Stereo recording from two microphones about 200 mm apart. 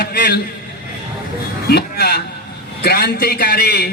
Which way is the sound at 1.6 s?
50° left (ahead or behind).